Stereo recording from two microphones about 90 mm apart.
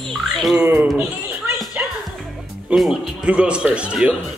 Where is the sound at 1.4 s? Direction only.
5° right (ahead or behind).